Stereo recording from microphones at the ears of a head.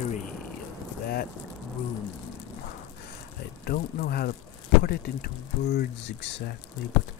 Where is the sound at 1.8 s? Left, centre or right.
Left.